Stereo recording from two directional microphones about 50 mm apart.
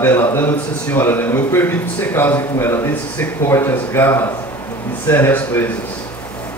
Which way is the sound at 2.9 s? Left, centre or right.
Left.